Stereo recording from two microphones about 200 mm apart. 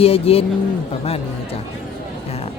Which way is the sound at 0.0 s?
30° left (ahead or behind).